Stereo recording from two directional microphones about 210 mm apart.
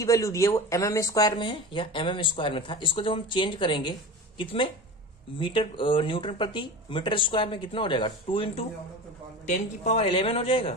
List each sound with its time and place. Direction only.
0.0 s speech: 15° left (ahead or behind)